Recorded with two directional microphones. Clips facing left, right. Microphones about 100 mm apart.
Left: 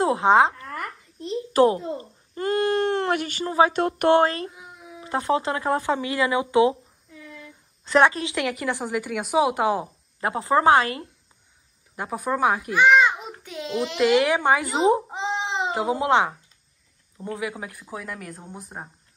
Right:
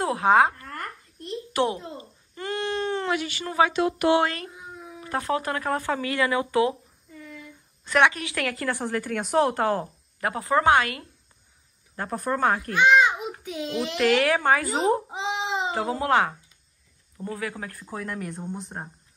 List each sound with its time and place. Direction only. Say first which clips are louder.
0.0 s speech: left 2 dB; 25° left (ahead or behind)
1.5 s a child's voice: left 7 dB; 35° left (ahead or behind)
3.4 s speech: left 3 dB; 30° left (ahead or behind)
3.7 s speech: left 2 dB; 50° left (ahead or behind)
4.5 s a sound: right 2 dB; 5° left (ahead or behind)
5.0 s speech: left 3 dB; 25° left (ahead or behind)
7.8 s a woman's voice: left 3 dB; 30° left (ahead or behind); by 9.8 s 10° left (ahead or behind)
10.2 s speech: left 2 dB; 25° left (ahead or behind)
12.0 s a child's voice: left 2 dB; 5° left (ahead or behind)
14.1 s speech: left 2 dB; 20° left (ahead or behind)
15.0 s babbling: left 1 dB; centre (ahead or behind)
15.7 s speech: left 3 dB; 15° left (ahead or behind)